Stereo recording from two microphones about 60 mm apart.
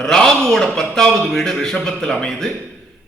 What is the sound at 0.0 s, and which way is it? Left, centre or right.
A man's voice, centre.